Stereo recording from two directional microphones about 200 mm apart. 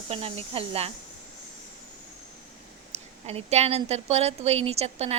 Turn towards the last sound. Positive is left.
turn(degrees=-30)  # may be behind; listen again after turning